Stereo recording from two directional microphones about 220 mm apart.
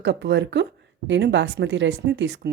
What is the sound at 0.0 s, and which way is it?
Speech, 50° right (ahead or behind).